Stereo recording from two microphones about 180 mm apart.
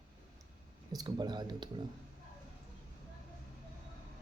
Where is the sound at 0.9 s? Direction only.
25° right (ahead or behind).